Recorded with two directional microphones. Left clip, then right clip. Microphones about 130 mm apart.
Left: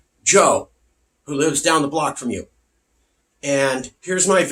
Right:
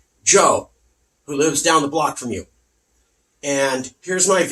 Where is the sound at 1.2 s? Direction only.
25° left (ahead or behind).